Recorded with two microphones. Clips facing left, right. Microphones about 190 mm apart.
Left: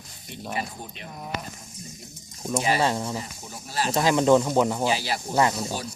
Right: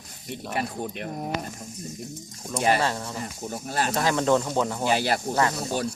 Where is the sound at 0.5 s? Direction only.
55° right (ahead or behind).